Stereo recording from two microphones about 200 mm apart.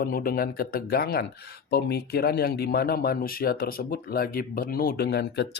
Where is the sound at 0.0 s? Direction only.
45° left (ahead or behind).